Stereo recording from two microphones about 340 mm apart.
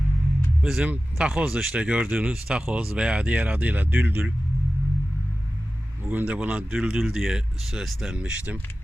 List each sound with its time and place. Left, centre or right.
0.6 s speech: centre
6.1 s speech: centre